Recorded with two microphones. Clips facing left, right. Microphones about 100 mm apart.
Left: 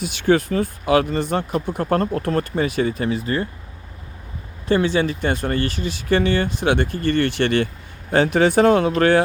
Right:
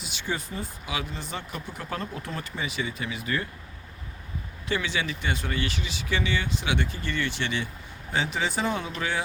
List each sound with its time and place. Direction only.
0.0 s speech: 60° left (ahead or behind); by 3.5 s 35° left (ahead or behind)
4.7 s speech: 40° left (ahead or behind); by 9.2 s 60° left (ahead or behind)